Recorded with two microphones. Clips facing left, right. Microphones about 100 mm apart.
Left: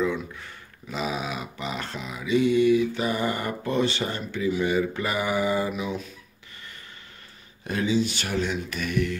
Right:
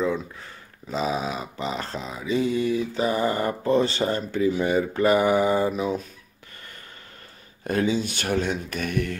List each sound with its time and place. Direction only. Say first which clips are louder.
0.0 s speech: right 1 dB; 30° right (ahead or behind)
7.6 s speech: right 1 dB; 45° right (ahead or behind)